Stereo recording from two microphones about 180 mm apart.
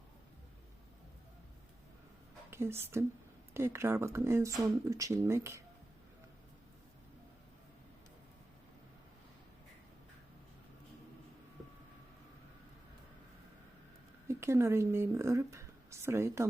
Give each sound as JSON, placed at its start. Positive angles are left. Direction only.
{"t": 2.5, "sound": "a woman's voice", "side_deg": -15}
{"t": 14.3, "sound": "speech", "side_deg": -15}